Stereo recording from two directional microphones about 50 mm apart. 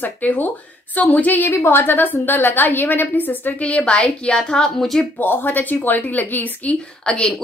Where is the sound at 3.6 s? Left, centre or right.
Left.